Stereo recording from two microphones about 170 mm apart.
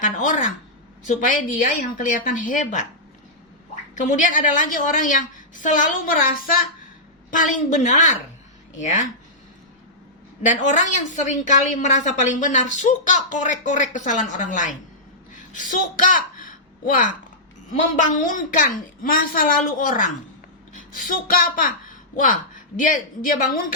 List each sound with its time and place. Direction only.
0.0 s a sound: 50° left (ahead or behind)
1.0 s a woman's voice: 50° left (ahead or behind)
3.9 s a woman's voice: 45° left (ahead or behind)
10.5 s a woman's voice: 45° left (ahead or behind)
15.3 s a sound: 50° left (ahead or behind)
18.1 s a woman's voice: 50° left (ahead or behind)